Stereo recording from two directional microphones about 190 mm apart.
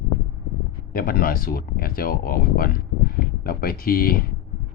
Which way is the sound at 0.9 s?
50° left (ahead or behind).